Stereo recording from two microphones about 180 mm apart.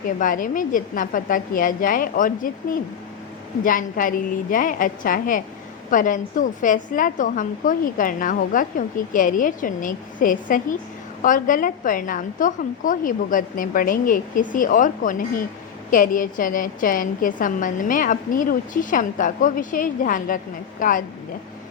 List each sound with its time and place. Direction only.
0.2 s a woman's voice: 50° left (ahead or behind)
3.6 s a woman's voice: 50° left (ahead or behind)